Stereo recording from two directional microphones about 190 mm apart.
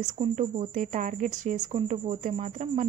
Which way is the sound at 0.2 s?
40° right (ahead or behind).